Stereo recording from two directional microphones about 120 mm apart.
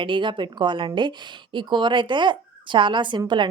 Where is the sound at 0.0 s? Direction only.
40° right (ahead or behind).